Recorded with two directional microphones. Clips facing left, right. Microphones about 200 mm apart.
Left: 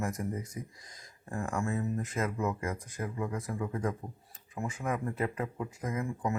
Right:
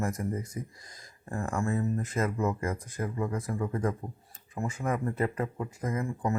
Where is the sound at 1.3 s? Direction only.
Centre (ahead or behind).